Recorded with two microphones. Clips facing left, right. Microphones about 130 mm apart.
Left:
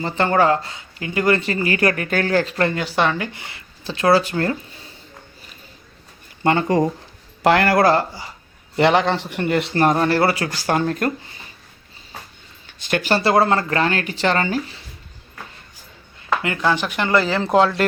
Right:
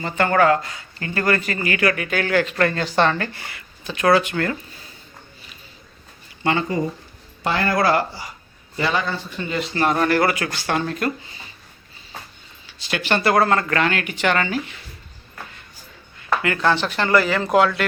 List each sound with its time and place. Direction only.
0.0 s speech: 25° left (ahead or behind)
0.9 s a woman's voice: 10° left (ahead or behind); by 2.7 s 30° left (ahead or behind)
2.7 s speech: 5° left (ahead or behind)
3.3 s speech: 25° left (ahead or behind)
6.4 s speech: 45° left (ahead or behind)
7.4 s speech: 75° left (ahead or behind)
7.9 s speech: 25° left (ahead or behind)
8.7 s speech: 70° left (ahead or behind)
10.0 s a woman's voice: 30° left (ahead or behind)
12.6 s a sound: 50° left (ahead or behind)
13.1 s a woman's voice: 25° left (ahead or behind)
16.4 s speech: 20° left (ahead or behind)
16.6 s speech: 10° left (ahead or behind)
17.1 s speech: 25° left (ahead or behind)